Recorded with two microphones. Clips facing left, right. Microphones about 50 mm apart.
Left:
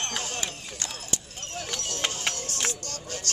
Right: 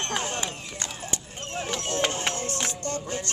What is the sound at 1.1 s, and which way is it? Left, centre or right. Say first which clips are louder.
Clip-clop: right 3 dB; right.